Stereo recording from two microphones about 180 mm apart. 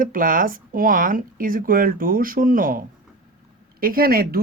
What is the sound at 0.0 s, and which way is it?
Speech, 50° right (ahead or behind).